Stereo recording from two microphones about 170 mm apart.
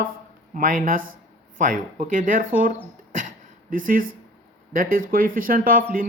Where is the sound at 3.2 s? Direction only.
55° right (ahead or behind).